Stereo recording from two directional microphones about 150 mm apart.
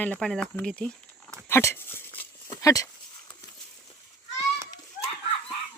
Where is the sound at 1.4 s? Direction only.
15° left (ahead or behind).